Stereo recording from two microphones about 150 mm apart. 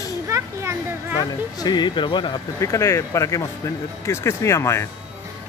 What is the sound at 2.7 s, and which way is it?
Speech, 20° left (ahead or behind).